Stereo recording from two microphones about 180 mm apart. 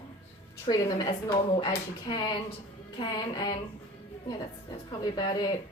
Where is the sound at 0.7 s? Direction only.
20° left (ahead or behind).